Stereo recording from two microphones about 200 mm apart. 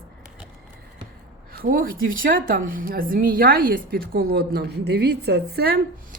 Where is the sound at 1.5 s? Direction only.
45° right (ahead or behind).